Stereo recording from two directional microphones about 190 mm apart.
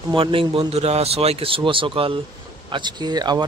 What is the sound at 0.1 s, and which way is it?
Speech, 30° right (ahead or behind).